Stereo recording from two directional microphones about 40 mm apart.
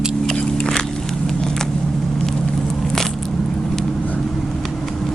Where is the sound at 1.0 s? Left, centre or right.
Centre.